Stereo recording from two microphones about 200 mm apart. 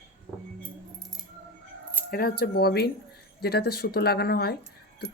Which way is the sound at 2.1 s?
50° left (ahead or behind).